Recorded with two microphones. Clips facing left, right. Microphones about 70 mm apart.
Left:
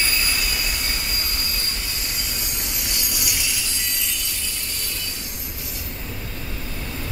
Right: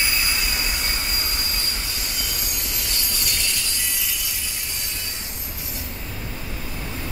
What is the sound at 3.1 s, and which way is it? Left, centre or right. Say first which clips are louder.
Train: right 1 dB; centre.